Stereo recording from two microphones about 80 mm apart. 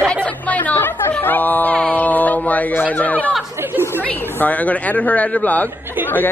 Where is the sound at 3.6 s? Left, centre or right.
Right.